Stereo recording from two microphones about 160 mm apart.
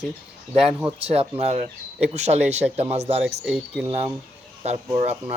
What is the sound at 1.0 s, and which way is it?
Speech, 40° right (ahead or behind).